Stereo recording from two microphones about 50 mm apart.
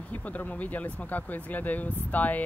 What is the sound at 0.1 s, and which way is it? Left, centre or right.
Speech, left.